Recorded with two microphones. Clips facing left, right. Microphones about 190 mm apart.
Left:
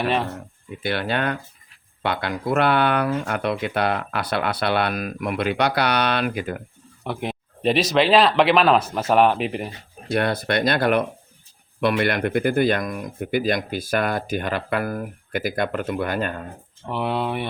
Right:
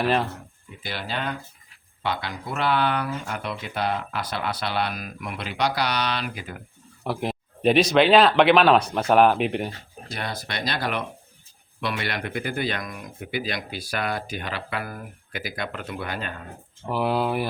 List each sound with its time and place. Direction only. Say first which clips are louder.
0.0 s speech: even; centre (ahead or behind)
0.8 s speech: left 7 dB; 60° left (ahead or behind)
7.0 s speech: even; centre (ahead or behind)
10.1 s speech: left 11 dB; 60° left (ahead or behind)
16.8 s speech: right 1 dB; 5° right (ahead or behind)